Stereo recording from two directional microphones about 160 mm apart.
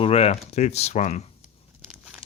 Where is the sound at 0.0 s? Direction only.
40° left (ahead or behind).